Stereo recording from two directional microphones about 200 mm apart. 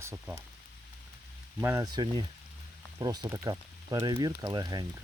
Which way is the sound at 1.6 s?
15° right (ahead or behind).